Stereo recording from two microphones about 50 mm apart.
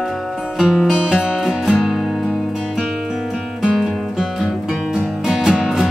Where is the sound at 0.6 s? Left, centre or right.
Centre.